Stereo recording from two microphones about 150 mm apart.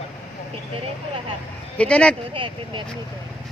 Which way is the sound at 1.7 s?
5° left (ahead or behind).